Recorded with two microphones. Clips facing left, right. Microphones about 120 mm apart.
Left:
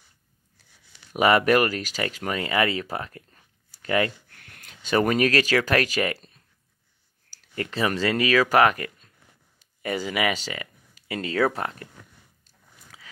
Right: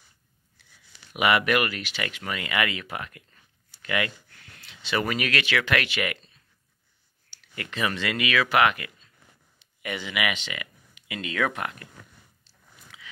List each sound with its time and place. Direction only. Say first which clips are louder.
0.6 s a sound: right 2 dB; 40° left (ahead or behind)
1.1 s speech: left 4 dB; 40° left (ahead or behind)
12.9 s horse: right 1 dB; 40° left (ahead or behind)